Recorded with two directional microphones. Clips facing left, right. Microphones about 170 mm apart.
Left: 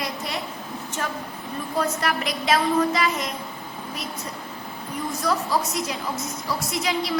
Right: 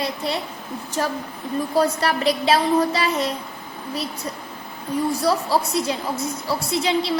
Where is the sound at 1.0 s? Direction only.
35° right (ahead or behind).